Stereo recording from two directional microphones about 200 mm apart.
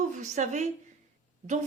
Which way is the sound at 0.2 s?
35° right (ahead or behind).